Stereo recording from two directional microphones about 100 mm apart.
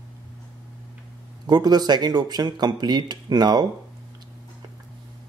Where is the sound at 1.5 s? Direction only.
45° right (ahead or behind).